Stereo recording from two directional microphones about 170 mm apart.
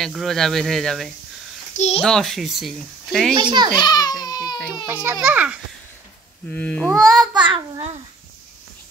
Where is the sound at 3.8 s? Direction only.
25° left (ahead or behind).